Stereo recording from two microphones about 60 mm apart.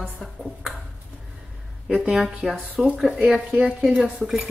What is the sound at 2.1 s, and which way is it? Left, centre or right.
Speech, centre.